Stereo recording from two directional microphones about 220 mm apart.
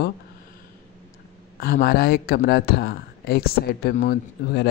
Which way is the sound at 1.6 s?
45° left (ahead or behind).